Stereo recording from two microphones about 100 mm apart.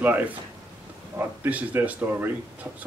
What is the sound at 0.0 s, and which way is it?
Speech, 20° right (ahead or behind).